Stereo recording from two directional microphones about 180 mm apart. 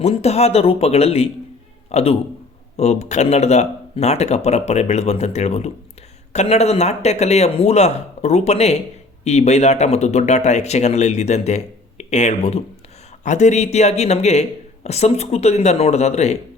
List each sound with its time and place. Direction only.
0.0 s a man's voice: 35° left (ahead or behind)